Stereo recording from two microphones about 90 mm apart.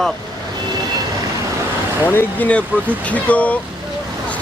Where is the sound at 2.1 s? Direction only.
25° left (ahead or behind).